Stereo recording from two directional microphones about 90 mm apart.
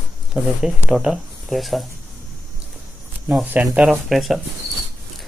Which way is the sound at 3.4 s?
20° right (ahead or behind).